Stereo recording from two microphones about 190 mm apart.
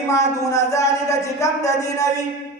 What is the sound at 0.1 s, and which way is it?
Speech, 15° left (ahead or behind).